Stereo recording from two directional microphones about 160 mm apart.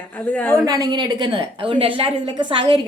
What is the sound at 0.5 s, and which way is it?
A woman's voice, 25° right (ahead or behind).